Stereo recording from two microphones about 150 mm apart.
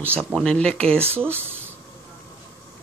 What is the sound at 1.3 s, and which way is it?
Speech, 15° right (ahead or behind).